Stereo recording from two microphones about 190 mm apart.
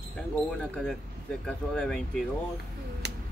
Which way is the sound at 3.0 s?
60° right (ahead or behind).